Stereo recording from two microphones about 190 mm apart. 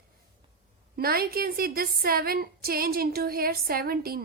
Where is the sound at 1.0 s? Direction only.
55° right (ahead or behind).